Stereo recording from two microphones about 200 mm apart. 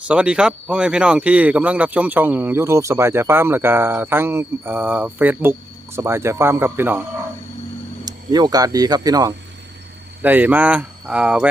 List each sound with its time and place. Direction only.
0.1 s speech: 5° right (ahead or behind)
8.0 s speech: 20° right (ahead or behind)